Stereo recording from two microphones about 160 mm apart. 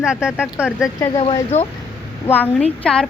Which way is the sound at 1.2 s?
40° left (ahead or behind).